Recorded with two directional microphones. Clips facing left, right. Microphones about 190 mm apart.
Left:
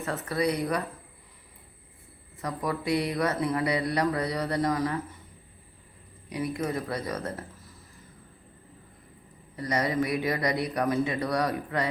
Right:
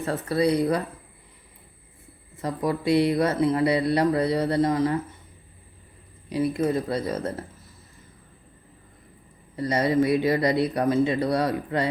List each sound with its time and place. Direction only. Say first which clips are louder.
0.0 s speech: right 5 dB; 35° right (ahead or behind)
2.4 s speech: right 5 dB; 25° right (ahead or behind)
6.3 s speech: right 6 dB; 30° right (ahead or behind)
9.6 s speech: right 5 dB; 25° right (ahead or behind)